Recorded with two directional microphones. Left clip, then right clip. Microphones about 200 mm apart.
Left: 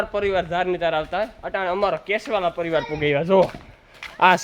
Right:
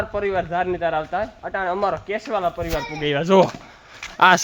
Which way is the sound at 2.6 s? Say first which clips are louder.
Left 3 dB; 15° left (ahead or behind).